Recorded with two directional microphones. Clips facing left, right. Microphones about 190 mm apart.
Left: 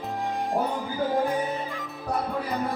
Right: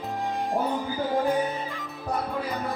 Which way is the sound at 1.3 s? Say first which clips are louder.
Right 2 dB; centre (ahead or behind).